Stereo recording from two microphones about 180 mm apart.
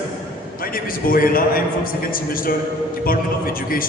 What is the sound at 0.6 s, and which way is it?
A man's voice, 50° left (ahead or behind).